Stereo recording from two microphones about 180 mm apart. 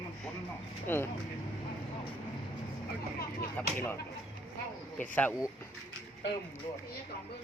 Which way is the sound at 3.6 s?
10° left (ahead or behind).